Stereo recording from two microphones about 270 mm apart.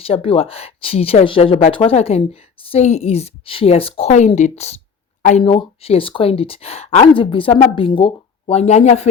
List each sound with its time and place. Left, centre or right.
0.0 s speech: left